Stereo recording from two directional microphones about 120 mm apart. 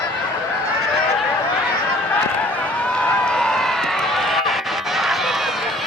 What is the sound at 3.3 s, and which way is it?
Run, 5° left (ahead or behind).